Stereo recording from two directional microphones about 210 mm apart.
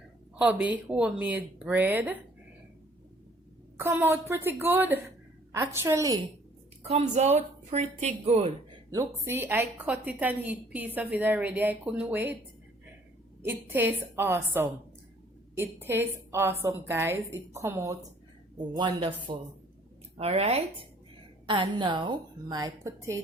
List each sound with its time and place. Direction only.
0.3 s a woman's voice: 5° right (ahead or behind)
3.8 s a woman's voice: 10° right (ahead or behind)
6.8 s a woman's voice: 30° right (ahead or behind)
8.9 s a woman's voice: 15° right (ahead or behind)
13.4 s a woman's voice: 10° right (ahead or behind)